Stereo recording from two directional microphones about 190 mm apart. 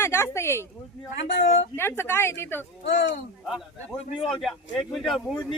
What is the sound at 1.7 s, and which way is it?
Speech, 10° left (ahead or behind).